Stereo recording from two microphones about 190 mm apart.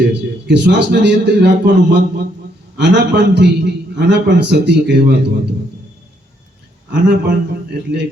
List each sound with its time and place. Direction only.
0.1 s a man's voice: 65° right (ahead or behind)
7.1 s a man's voice: 60° right (ahead or behind)